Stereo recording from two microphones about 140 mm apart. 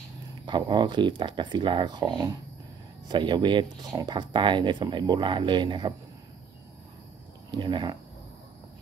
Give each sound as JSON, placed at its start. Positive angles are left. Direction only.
{"t": 0.5, "sound": "speech", "side_deg": -35}
{"t": 7.5, "sound": "speech", "side_deg": -35}